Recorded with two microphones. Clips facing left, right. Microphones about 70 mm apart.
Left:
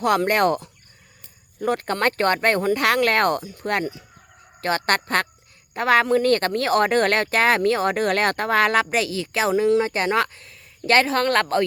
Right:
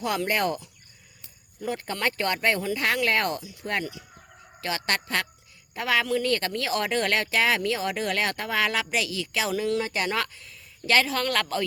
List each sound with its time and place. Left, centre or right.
0.0 s speech: left